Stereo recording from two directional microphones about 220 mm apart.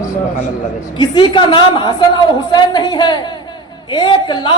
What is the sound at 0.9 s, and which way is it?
A woman's voice, 20° left (ahead or behind).